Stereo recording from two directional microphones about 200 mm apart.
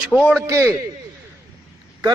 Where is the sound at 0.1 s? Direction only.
5° right (ahead or behind).